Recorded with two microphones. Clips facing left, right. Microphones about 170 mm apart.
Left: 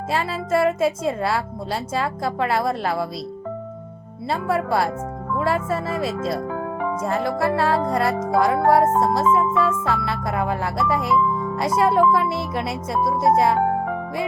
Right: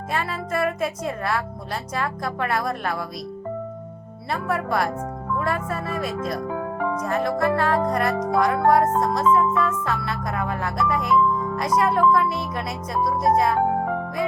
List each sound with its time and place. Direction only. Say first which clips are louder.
0.1 s speech: left 4 dB; 30° left (ahead or behind)
4.3 s speech: left 3 dB; 30° left (ahead or behind)